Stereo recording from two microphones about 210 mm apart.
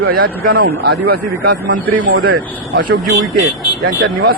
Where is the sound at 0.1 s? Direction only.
45° right (ahead or behind).